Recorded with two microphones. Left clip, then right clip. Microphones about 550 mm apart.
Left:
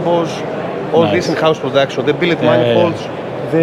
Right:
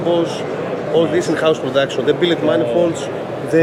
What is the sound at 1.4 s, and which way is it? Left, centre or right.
Speech, left.